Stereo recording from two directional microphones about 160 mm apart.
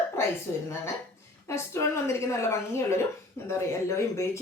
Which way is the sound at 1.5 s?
15° left (ahead or behind).